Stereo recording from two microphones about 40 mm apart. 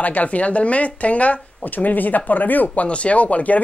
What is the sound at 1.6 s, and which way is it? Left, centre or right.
Speech, left.